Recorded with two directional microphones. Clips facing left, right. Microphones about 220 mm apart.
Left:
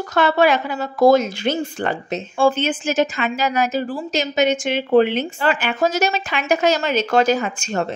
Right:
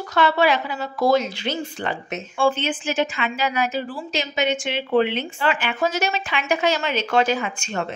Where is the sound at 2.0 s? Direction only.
35° left (ahead or behind).